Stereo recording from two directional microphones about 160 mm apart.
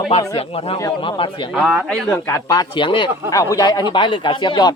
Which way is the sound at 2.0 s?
15° left (ahead or behind).